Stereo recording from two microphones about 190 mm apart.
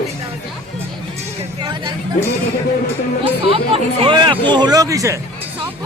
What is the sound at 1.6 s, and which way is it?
Speech, 25° right (ahead or behind).